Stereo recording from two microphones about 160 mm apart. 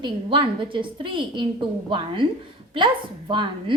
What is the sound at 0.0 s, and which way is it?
A woman's voice, 30° right (ahead or behind).